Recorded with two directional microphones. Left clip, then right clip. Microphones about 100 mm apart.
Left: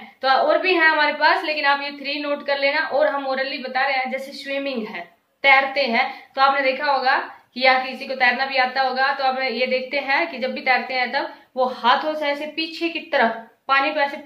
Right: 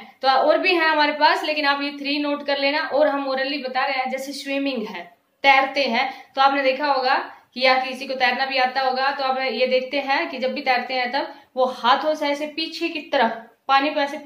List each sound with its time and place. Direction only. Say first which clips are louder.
0.2 s a woman's voice: even; 30° right (ahead or behind)
6.7 s a woman's voice: left 1 dB; 20° right (ahead or behind)